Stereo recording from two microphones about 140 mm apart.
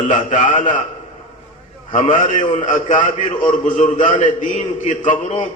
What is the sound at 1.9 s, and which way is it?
A man's voice, 65° left (ahead or behind).